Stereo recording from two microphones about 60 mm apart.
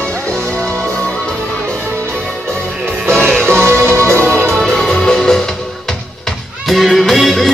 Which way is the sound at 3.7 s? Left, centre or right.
Right.